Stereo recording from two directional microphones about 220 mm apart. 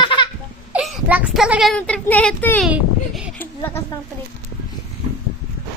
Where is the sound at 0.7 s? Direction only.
Centre (ahead or behind).